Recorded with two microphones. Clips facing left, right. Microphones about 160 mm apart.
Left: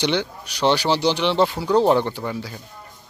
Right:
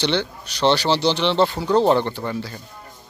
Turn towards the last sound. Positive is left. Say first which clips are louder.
# right 1 dB
turn(degrees=5)  # may be behind; listen again after turning